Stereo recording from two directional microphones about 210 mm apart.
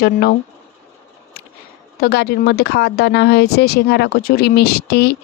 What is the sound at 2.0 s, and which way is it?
Speech, 50° left (ahead or behind).